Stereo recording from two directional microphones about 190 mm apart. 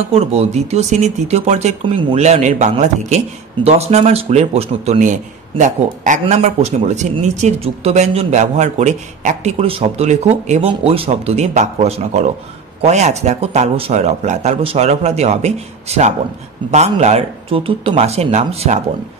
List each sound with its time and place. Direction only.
0.1 s speech: 35° right (ahead or behind)